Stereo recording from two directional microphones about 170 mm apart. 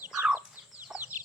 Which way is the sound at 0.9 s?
5° right (ahead or behind).